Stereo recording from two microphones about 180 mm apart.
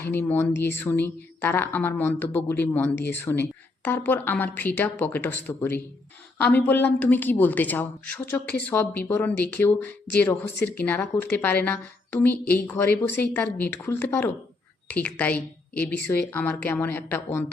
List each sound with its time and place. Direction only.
0.0 s a woman's voice: 10° left (ahead or behind)